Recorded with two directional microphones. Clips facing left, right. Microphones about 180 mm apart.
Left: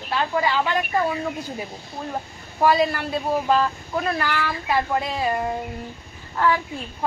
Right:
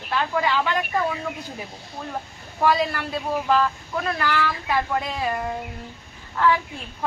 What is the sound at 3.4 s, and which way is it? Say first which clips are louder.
Speech: right 1 dB; 15° left (ahead or behind).